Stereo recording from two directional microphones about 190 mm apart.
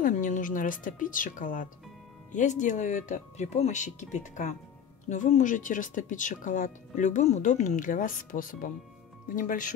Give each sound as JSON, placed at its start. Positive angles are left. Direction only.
{"t": 0.0, "sound": "speech", "side_deg": 40}